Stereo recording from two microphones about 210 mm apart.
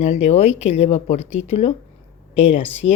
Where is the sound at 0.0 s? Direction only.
30° left (ahead or behind).